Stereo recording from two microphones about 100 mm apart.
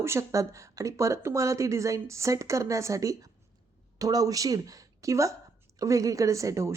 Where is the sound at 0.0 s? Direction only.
30° right (ahead or behind).